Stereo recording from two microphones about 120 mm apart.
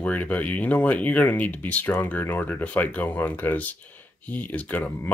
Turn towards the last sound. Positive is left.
turn(degrees=10)  # may be behind; listen again after turning